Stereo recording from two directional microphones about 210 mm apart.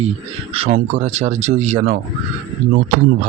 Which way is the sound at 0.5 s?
30° right (ahead or behind).